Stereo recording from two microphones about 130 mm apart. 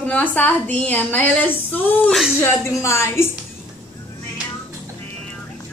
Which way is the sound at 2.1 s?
Centre (ahead or behind).